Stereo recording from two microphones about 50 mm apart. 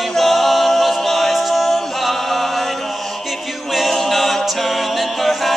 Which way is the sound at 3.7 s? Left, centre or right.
Centre.